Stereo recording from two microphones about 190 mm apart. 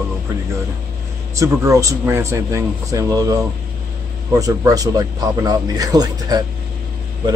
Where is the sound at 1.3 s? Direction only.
15° right (ahead or behind).